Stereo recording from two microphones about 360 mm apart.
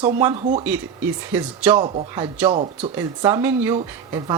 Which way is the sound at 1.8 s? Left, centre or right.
Centre.